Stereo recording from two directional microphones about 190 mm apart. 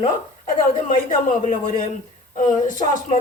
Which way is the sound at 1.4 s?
45° left (ahead or behind).